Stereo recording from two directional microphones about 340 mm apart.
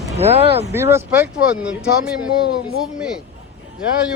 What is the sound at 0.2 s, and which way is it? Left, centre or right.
Speech, centre.